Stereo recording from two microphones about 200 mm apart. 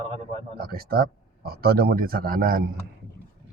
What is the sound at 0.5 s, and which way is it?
Speech, 50° right (ahead or behind).